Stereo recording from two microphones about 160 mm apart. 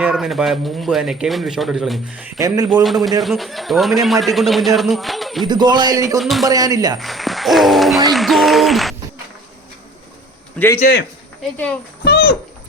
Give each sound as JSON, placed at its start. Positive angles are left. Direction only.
{"t": 0.0, "sound": "a man's voice", "side_deg": -5}
{"t": 5.5, "sound": "speech", "side_deg": -25}
{"t": 6.1, "sound": "a man's voice", "side_deg": 0}
{"t": 6.4, "sound": "speech", "side_deg": -25}
{"t": 7.0, "sound": "a sound", "side_deg": 0}
{"t": 8.1, "sound": "a man's voice", "side_deg": 0}
{"t": 10.6, "sound": "speech", "side_deg": 10}
{"t": 12.0, "sound": "a sound", "side_deg": 70}